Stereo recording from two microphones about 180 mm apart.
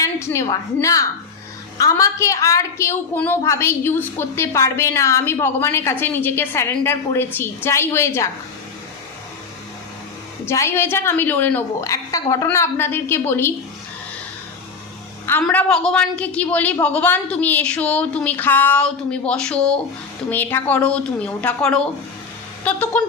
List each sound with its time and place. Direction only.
0.0 s a woman's voice: 15° left (ahead or behind)
10.4 s a woman's voice: 15° left (ahead or behind)
15.3 s a woman's voice: 5° left (ahead or behind)
22.9 s a woman's voice: 10° left (ahead or behind)